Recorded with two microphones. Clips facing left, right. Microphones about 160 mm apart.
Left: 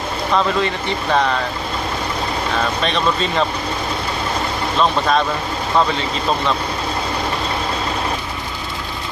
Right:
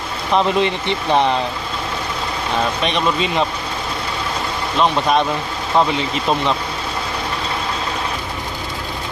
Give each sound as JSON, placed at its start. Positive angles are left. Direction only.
{"t": 0.3, "sound": "speech", "side_deg": -20}
{"t": 2.8, "sound": "speech", "side_deg": -15}